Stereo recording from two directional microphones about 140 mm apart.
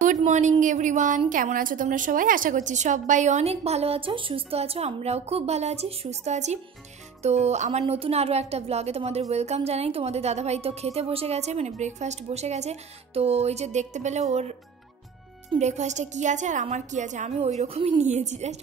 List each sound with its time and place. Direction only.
0.0 s a woman's voice: 60° right (ahead or behind)
1.3 s a woman's voice: 75° right (ahead or behind); by 14.2 s 55° right (ahead or behind)
15.6 s a woman's voice: 55° right (ahead or behind)
18.0 s a woman's voice: 55° right (ahead or behind)